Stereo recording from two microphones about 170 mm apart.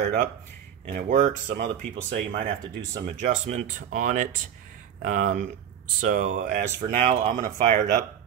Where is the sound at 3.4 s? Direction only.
45° right (ahead or behind).